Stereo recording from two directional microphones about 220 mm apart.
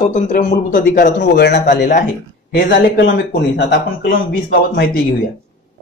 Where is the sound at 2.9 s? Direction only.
50° left (ahead or behind).